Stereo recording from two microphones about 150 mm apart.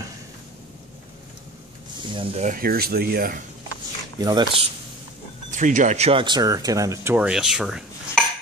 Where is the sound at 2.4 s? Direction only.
70° right (ahead or behind).